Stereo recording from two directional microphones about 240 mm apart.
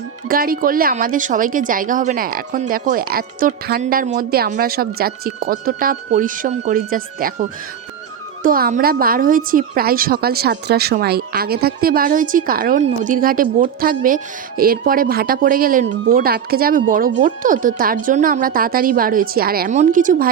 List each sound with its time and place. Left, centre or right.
0.3 s speech: right
8.4 s speech: right